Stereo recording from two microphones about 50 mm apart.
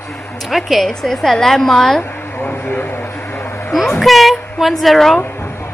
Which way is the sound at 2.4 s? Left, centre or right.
Left.